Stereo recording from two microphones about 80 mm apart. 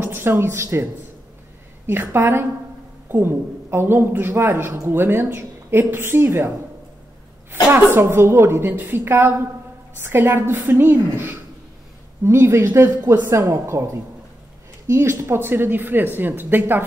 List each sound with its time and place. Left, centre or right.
0.0 s speech: right
1.9 s speech: right
7.7 s speech: right
14.9 s speech: right